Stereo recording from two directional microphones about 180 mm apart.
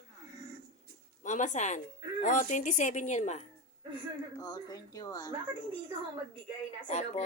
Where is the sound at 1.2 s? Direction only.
45° left (ahead or behind).